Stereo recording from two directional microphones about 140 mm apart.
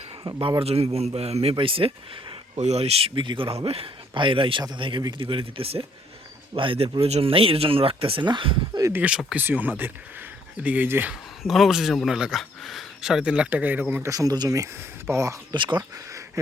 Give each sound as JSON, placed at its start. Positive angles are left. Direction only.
{"t": 0.3, "sound": "speech", "side_deg": -30}
{"t": 0.6, "sound": "speech", "side_deg": -45}
{"t": 2.6, "sound": "speech", "side_deg": -50}
{"t": 8.8, "sound": "speech", "side_deg": -15}
{"t": 11.1, "sound": "speech", "side_deg": 0}
{"t": 15.5, "sound": "speech", "side_deg": -35}